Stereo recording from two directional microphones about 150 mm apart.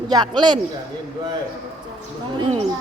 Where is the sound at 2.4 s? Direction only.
45° right (ahead or behind).